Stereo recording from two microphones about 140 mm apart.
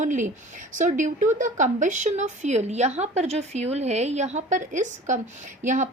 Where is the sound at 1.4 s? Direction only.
60° right (ahead or behind).